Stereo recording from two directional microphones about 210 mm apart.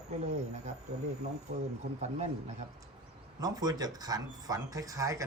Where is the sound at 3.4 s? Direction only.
20° right (ahead or behind).